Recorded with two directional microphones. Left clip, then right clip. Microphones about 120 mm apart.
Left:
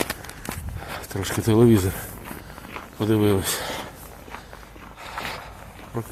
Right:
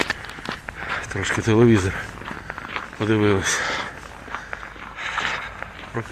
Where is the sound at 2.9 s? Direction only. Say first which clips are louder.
Right 1 dB; 45° left (ahead or behind).